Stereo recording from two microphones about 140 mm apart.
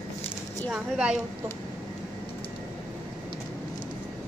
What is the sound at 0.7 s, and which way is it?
Speech, 5° right (ahead or behind).